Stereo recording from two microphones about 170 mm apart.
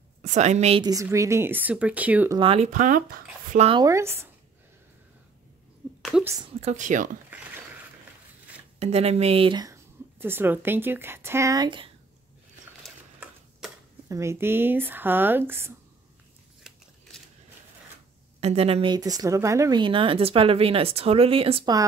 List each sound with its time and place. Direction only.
0.2 s speech: 45° right (ahead or behind)
0.8 s speech: 20° right (ahead or behind)
2.3 s speech: 35° right (ahead or behind)
2.7 s speech: 50° right (ahead or behind)
3.7 s speech: 20° right (ahead or behind)
6.2 s a woman's voice: 20° right (ahead or behind)
6.6 s speech: 45° right (ahead or behind)
7.3 s a sound: 10° right (ahead or behind)
8.7 s speech: 40° right (ahead or behind)
14.0 s speech: 15° right (ahead or behind)
18.4 s speech: 35° right (ahead or behind)
18.9 s speech: 20° right (ahead or behind)